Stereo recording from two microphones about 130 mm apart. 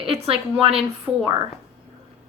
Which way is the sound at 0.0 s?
45° right (ahead or behind).